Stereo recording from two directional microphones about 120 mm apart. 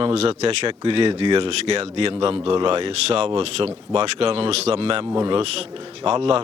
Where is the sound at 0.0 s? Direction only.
55° right (ahead or behind).